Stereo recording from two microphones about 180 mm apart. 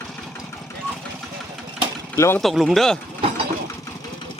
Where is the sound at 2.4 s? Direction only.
Centre (ahead or behind).